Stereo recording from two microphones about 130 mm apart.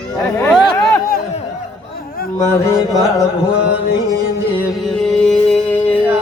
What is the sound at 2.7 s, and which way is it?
Music, 25° left (ahead or behind).